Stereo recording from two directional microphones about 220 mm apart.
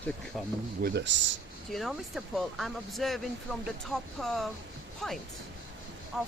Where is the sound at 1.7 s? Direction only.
Centre (ahead or behind).